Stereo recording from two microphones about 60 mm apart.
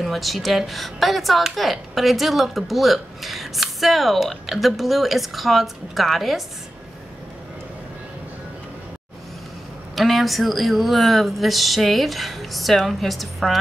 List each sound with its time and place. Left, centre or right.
0.0 s speech: centre
9.9 s speech: centre